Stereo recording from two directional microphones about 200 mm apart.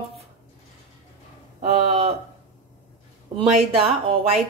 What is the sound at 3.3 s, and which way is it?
Speech, 30° right (ahead or behind).